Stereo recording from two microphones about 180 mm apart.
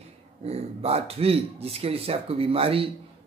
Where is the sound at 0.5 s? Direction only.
35° right (ahead or behind).